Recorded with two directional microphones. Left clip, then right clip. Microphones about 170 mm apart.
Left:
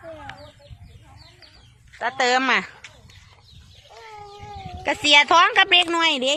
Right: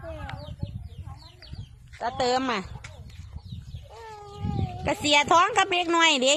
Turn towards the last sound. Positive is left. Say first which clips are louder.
# even
turn(degrees=0)  # may be behind; listen again after turning